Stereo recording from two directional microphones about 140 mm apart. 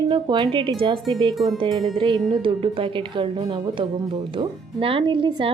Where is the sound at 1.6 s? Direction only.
30° right (ahead or behind).